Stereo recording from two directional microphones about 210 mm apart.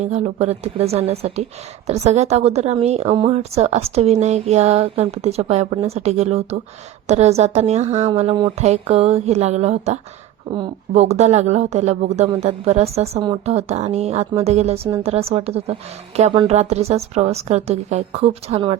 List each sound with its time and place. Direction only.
0.0 s speech: 30° right (ahead or behind)